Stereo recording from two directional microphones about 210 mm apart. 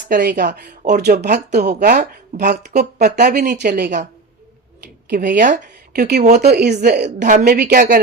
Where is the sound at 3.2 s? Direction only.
50° right (ahead or behind).